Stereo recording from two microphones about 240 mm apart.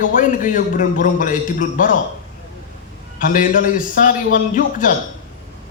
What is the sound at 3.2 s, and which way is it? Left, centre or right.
Speech, left.